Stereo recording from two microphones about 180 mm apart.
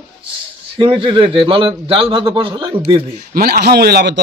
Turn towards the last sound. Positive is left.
turn(degrees=-65)  # may be behind; listen again after turning